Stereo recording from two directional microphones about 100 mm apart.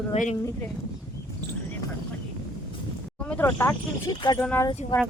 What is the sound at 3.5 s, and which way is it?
Speech, 25° left (ahead or behind).